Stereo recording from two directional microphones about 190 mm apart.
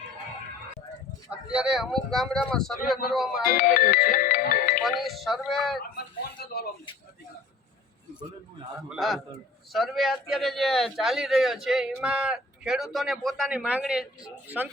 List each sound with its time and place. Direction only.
1.3 s speech: 5° right (ahead or behind)
3.5 s speech: 50° left (ahead or behind)
4.8 s speech: centre (ahead or behind)
6.4 s a sound: 55° left (ahead or behind)
8.9 s speech: centre (ahead or behind)